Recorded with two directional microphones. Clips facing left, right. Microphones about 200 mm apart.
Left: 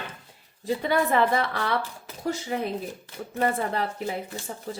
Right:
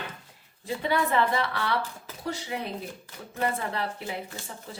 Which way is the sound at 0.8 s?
45° left (ahead or behind).